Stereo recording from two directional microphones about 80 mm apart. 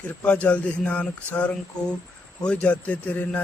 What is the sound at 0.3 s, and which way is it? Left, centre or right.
A man's voice, centre.